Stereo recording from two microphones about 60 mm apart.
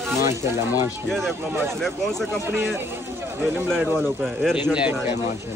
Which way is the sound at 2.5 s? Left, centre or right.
Right.